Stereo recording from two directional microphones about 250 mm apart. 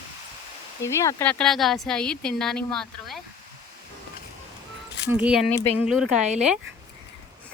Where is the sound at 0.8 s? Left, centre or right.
Centre.